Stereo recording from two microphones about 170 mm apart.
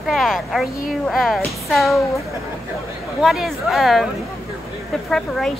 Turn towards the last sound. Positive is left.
turn(degrees=5)  # may be behind; listen again after turning